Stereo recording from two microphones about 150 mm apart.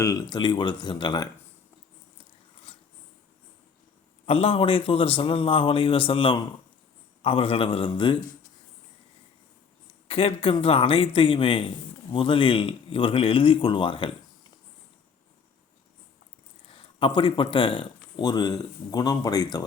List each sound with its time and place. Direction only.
0.0 s speech: 25° left (ahead or behind)
4.3 s speech: 40° left (ahead or behind)
9.8 s speech: 40° left (ahead or behind)
16.6 s speech: 35° left (ahead or behind)